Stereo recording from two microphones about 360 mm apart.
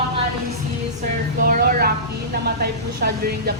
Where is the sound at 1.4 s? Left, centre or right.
Right.